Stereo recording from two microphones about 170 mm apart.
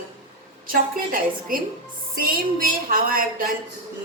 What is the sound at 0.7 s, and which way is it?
A woman's voice, 55° right (ahead or behind).